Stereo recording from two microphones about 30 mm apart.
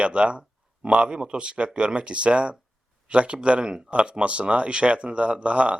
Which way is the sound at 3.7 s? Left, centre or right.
Right.